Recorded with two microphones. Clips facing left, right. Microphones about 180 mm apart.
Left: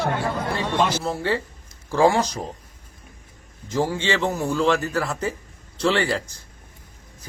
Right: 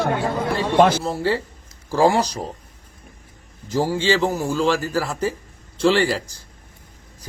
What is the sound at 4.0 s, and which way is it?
Speech, 35° right (ahead or behind).